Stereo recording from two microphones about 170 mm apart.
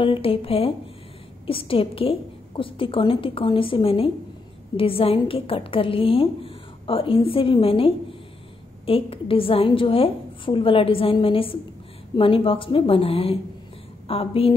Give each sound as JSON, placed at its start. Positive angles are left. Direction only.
{"t": 0.0, "sound": "a woman's voice", "side_deg": 30}